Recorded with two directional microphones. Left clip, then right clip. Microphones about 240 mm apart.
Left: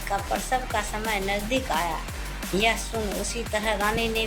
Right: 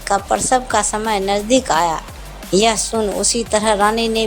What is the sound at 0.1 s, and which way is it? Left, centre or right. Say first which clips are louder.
Speech: right 11 dB; right.